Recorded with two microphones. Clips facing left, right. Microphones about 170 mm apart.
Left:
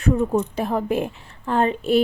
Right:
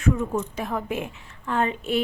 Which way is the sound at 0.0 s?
35° left (ahead or behind).